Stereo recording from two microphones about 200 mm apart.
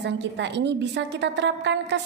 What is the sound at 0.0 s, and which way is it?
A woman's voice, 60° right (ahead or behind).